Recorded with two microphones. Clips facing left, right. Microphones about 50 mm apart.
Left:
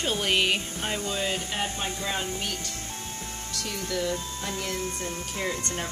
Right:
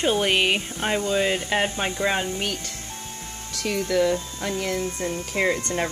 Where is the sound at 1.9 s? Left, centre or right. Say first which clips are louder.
Right 6 dB; right.